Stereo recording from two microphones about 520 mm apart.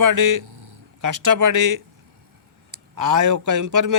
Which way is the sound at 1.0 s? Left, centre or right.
Right.